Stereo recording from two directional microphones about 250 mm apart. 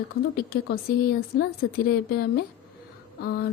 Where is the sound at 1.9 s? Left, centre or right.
Left.